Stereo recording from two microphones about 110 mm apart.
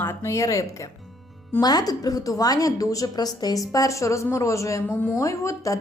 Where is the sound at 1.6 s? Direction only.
35° left (ahead or behind).